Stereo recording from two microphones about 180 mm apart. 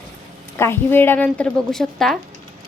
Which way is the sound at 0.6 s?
10° left (ahead or behind).